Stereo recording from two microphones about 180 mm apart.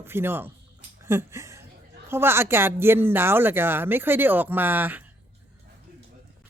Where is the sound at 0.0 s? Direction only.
10° right (ahead or behind).